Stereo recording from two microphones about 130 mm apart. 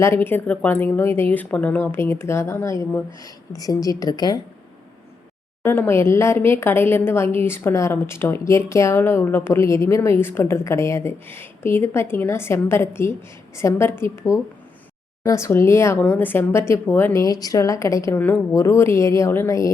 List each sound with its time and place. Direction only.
0.0 s a woman's voice: 20° left (ahead or behind)
5.6 s a woman's voice: 15° left (ahead or behind)